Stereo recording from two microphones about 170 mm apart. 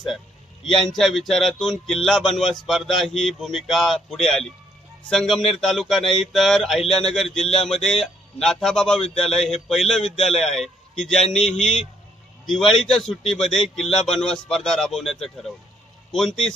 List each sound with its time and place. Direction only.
0.7 s a man's voice: centre (ahead or behind)